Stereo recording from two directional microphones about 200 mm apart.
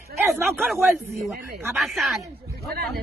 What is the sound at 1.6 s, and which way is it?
Speech, centre (ahead or behind).